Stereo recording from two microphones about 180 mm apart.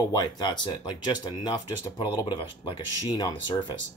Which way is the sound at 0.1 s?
25° left (ahead or behind).